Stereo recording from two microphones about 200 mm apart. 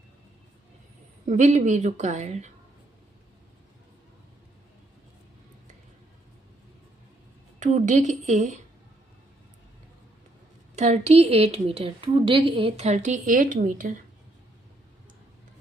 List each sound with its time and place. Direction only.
1.3 s a woman's voice: 35° right (ahead or behind)
7.6 s a woman's voice: 35° right (ahead or behind)
10.8 s a woman's voice: 35° right (ahead or behind)